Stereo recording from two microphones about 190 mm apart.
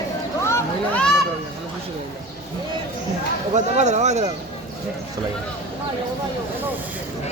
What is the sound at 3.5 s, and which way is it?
Speech, 35° right (ahead or behind).